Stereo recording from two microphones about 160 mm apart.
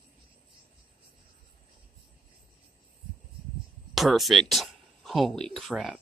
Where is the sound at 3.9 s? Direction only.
Centre (ahead or behind).